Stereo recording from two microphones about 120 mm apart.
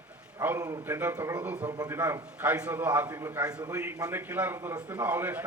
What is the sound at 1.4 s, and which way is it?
A man's voice, 15° right (ahead or behind).